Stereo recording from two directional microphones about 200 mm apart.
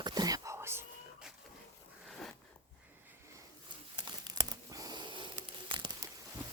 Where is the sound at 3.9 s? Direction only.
20° right (ahead or behind).